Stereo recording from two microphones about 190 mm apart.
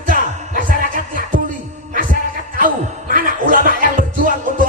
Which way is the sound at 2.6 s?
45° right (ahead or behind).